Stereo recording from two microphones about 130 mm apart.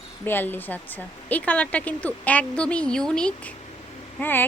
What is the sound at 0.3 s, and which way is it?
Speech, 15° left (ahead or behind).